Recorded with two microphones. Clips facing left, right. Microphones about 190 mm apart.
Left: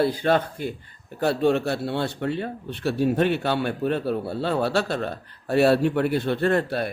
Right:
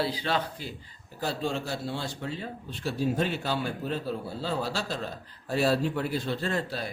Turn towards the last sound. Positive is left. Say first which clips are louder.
# left 9 dB
turn(degrees=60)  # may be behind; listen again after turning